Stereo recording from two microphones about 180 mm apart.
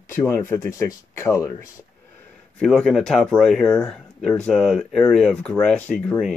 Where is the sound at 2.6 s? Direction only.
Centre (ahead or behind).